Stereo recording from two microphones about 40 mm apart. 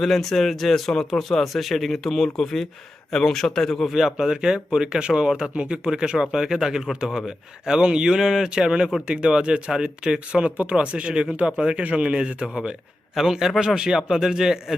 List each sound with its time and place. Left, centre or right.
0.0 s speech: centre
3.9 s speech: centre
4.3 s speech: centre
5.5 s speech: right
5.9 s speech: centre
11.8 s speech: right
13.1 s speech: centre